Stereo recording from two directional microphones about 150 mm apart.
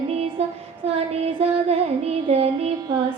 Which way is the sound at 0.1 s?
45° right (ahead or behind).